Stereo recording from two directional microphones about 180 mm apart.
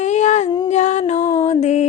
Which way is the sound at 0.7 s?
40° left (ahead or behind).